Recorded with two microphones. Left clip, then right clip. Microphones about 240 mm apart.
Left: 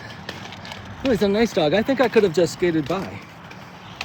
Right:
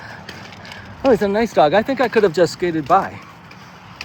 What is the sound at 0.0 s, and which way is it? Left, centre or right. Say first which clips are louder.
Vehicle: right 1 dB; left.